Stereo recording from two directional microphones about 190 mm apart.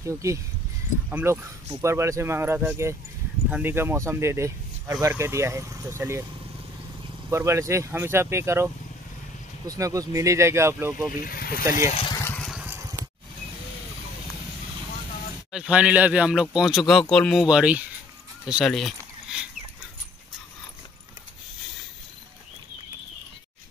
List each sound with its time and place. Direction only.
0.0 s speech: 15° right (ahead or behind)
7.2 s speech: 15° right (ahead or behind)
11.1 s speech: 50° left (ahead or behind)
11.9 s vehicle: 30° left (ahead or behind)
12.4 s vehicle: centre (ahead or behind)
12.6 s a sound: 10° right (ahead or behind)
15.5 s speech: 5° right (ahead or behind)
18.4 s a sound: 5° right (ahead or behind)